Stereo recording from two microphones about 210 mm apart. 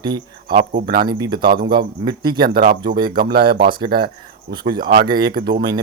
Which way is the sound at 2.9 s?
20° right (ahead or behind).